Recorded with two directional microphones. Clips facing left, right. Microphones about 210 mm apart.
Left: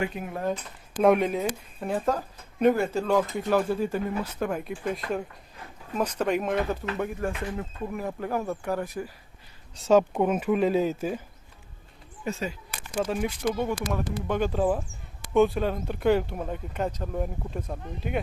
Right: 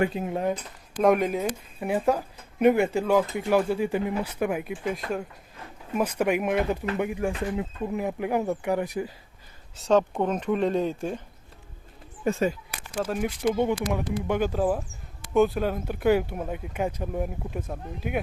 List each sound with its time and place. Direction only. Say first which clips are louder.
0.1 s speech: right 5 dB; 25° right (ahead or behind)
1.0 s speech: even; centre (ahead or behind); by 9.1 s 15° right (ahead or behind)
9.7 s speech: left 1 dB; centre (ahead or behind)
12.2 s speech: right 7 dB; 50° right (ahead or behind)
12.7 s speech: left 1 dB; 5° right (ahead or behind)
13.5 s speech: right 6 dB; 15° right (ahead or behind)